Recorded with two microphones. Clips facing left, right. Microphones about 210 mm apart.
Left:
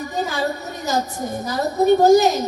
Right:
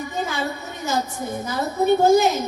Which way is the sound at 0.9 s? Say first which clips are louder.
Left 2 dB; 40° left (ahead or behind).